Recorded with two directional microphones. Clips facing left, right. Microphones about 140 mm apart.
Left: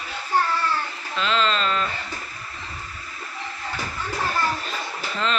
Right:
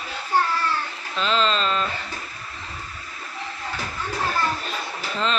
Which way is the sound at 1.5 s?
25° right (ahead or behind).